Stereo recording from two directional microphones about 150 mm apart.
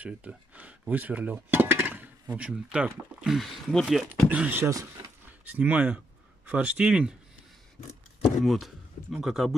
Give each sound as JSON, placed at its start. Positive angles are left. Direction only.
{"t": 0.0, "sound": "speech", "side_deg": -10}
{"t": 8.5, "sound": "speech", "side_deg": 0}